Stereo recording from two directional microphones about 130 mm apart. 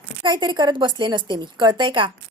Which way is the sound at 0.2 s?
35° right (ahead or behind).